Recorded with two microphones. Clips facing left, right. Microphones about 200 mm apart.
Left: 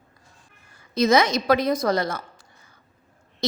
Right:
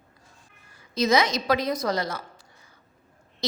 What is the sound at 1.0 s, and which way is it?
A woman's voice, 50° left (ahead or behind).